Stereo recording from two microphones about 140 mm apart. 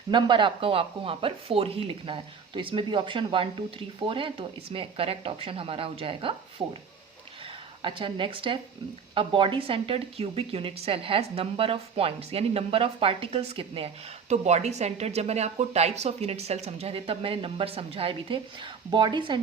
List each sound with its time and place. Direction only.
0.1 s speech: 35° right (ahead or behind)
6.6 s speech: 30° right (ahead or behind)
7.8 s a woman's voice: 35° right (ahead or behind)